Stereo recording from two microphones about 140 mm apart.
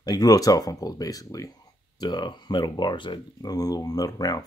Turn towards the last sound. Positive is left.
turn(degrees=25)  # may be behind; listen again after turning